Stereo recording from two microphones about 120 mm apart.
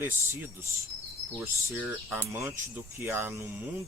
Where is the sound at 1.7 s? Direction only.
15° right (ahead or behind).